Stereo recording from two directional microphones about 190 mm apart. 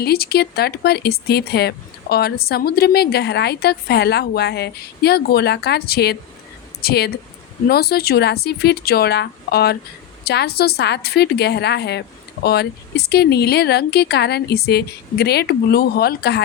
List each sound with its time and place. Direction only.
0.0 s speech: 55° left (ahead or behind)